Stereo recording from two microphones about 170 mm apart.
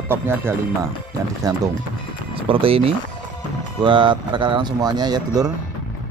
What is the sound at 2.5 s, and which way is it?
Speech, 30° right (ahead or behind).